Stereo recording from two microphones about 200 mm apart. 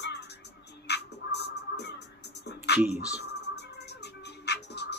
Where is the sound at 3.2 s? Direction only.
55° left (ahead or behind).